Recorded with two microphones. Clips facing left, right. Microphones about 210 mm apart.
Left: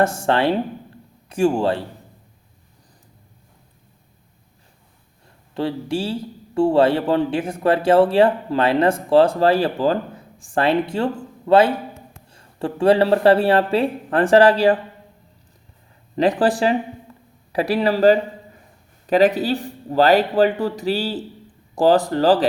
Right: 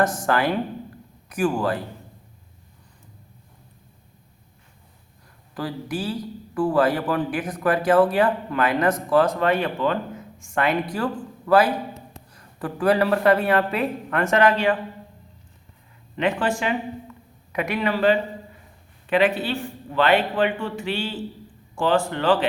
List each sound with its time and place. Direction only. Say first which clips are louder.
0.0 s a man's voice: left 3 dB; 25° left (ahead or behind)
5.5 s a man's voice: left 5 dB; 25° left (ahead or behind)
16.1 s speech: left 6 dB; 35° left (ahead or behind)